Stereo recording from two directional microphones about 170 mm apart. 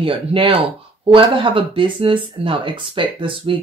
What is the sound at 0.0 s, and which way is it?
Speech, 30° right (ahead or behind).